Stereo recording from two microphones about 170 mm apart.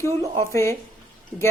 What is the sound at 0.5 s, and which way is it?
Speech, 15° left (ahead or behind).